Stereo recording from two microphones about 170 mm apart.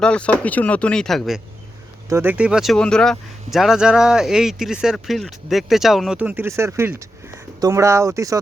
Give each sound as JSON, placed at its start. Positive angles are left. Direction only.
{"t": 0.0, "sound": "speech", "side_deg": 5}
{"t": 2.0, "sound": "speech", "side_deg": -15}